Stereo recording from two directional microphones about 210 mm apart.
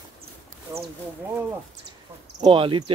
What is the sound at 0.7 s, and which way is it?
Speech, 15° right (ahead or behind).